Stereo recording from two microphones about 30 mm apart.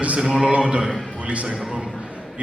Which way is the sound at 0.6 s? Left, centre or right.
Right.